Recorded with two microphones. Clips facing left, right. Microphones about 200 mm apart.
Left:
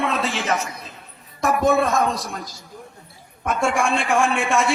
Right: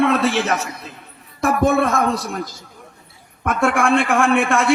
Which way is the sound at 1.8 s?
60° right (ahead or behind).